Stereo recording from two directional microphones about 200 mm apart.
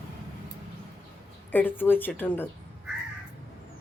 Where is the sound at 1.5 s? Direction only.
10° left (ahead or behind).